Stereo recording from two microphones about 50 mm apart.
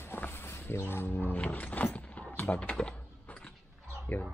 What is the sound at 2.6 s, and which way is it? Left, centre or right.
Speech, left.